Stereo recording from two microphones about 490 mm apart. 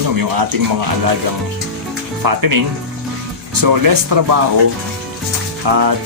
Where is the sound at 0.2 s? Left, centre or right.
Right.